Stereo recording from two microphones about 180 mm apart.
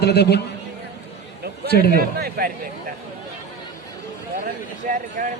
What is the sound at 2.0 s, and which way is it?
Speech, 60° right (ahead or behind).